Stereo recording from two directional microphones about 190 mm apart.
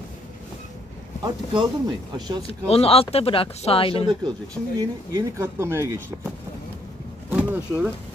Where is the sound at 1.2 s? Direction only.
25° right (ahead or behind).